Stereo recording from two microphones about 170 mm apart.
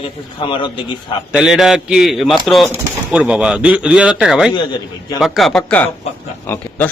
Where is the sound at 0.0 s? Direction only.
30° left (ahead or behind).